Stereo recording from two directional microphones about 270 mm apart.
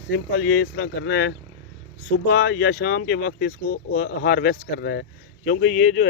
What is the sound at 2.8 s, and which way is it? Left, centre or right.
Speech, left.